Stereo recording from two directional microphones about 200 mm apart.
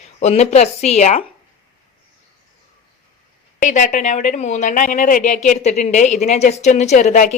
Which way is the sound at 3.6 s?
40° left (ahead or behind).